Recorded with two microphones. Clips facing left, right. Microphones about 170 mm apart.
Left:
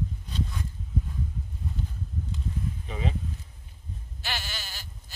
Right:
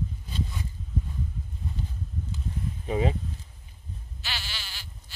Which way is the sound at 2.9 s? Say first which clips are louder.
Right 9 dB; 45° right (ahead or behind).